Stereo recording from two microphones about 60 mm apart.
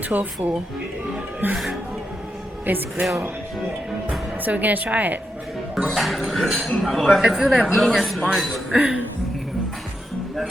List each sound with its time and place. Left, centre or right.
0.1 s a woman's voice: right
1.5 s speech: centre
2.6 s speech: right
4.4 s a woman's voice: right
5.7 s speech: centre
7.2 s speech: centre
8.7 s speech: centre